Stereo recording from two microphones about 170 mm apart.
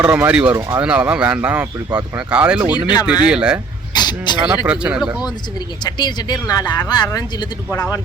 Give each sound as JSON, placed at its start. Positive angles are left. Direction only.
{"t": 0.0, "sound": "speech", "side_deg": -10}
{"t": 2.7, "sound": "speech", "side_deg": 25}
{"t": 3.2, "sound": "speech", "side_deg": -5}
{"t": 3.9, "sound": "vehicle", "side_deg": 25}
{"t": 4.4, "sound": "speech", "side_deg": -5}
{"t": 5.2, "sound": "speech", "side_deg": 25}